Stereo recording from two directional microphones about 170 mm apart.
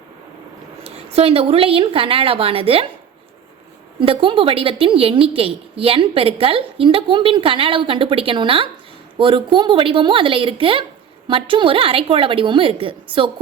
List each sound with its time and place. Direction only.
0.9 s a woman's voice: 35° right (ahead or behind)
4.0 s a woman's voice: 30° right (ahead or behind)